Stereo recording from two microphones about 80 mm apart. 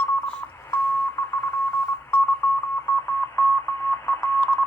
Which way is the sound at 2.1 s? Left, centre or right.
Left.